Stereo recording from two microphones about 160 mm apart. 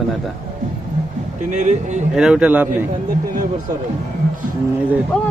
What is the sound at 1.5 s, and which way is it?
Speech, 50° right (ahead or behind).